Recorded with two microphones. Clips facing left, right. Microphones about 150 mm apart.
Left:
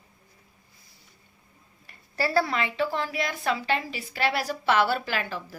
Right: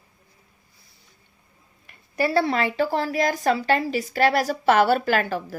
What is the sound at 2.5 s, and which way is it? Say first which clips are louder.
A woman's voice: right 5 dB; 40° right (ahead or behind).